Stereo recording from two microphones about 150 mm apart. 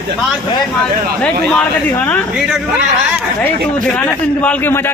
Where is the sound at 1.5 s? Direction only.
10° left (ahead or behind).